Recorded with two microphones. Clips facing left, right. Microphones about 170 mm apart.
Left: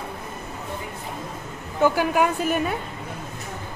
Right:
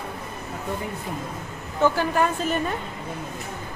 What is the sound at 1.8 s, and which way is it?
Speech, 10° left (ahead or behind).